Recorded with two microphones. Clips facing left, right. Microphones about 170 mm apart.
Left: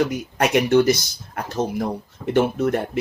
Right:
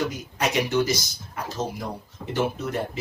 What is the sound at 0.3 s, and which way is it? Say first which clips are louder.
Speech: left 7 dB; 60° left (ahead or behind).